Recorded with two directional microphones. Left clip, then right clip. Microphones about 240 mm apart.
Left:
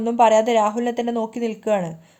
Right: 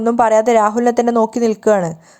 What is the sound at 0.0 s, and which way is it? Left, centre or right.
Speech, right.